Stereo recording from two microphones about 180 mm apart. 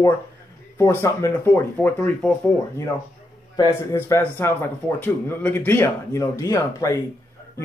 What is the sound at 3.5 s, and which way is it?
Speech, 20° left (ahead or behind).